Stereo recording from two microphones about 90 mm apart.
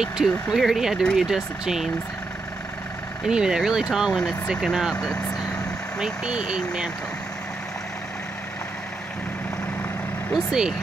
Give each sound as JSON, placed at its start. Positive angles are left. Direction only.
{"t": 0.0, "sound": "speech", "side_deg": -5}
{"t": 3.3, "sound": "speech", "side_deg": -5}
{"t": 4.6, "sound": "speech", "side_deg": 5}
{"t": 5.9, "sound": "speech", "side_deg": -10}
{"t": 10.3, "sound": "speech", "side_deg": -5}